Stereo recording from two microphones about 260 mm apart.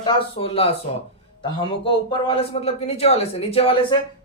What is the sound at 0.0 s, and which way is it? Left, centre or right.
A man's voice, centre.